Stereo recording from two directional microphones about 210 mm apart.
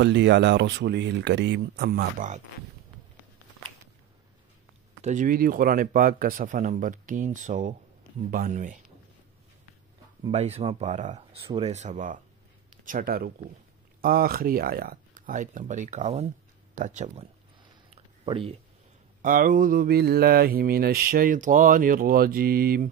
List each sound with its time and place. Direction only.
0.0 s speech: 55° right (ahead or behind); by 2.4 s 40° right (ahead or behind)
5.0 s speech: 40° right (ahead or behind)
10.3 s speech: 30° right (ahead or behind)
12.8 s mantra: 40° right (ahead or behind)
14.0 s speech: 45° right (ahead or behind); by 18.6 s 25° right (ahead or behind)
19.2 s mantra: 40° right (ahead or behind)